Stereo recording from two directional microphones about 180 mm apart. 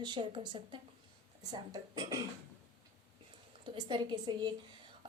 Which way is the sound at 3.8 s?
25° right (ahead or behind).